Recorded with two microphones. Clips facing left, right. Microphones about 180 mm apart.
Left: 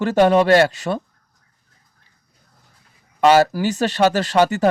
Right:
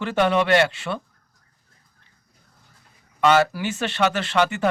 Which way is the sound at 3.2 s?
40° left (ahead or behind).